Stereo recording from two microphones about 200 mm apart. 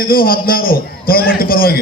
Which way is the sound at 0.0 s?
45° left (ahead or behind).